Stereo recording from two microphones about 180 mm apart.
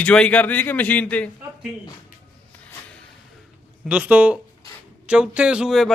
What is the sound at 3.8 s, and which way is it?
Speech, 10° right (ahead or behind).